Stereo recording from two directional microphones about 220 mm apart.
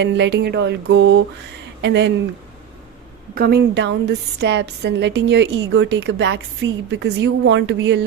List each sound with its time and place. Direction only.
0.0 s a woman's voice: 55° right (ahead or behind)
3.3 s a woman's voice: 45° right (ahead or behind)